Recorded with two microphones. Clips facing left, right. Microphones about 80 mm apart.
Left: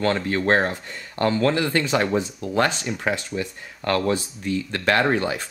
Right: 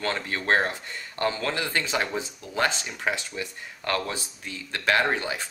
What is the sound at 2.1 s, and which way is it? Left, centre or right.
Speech, left.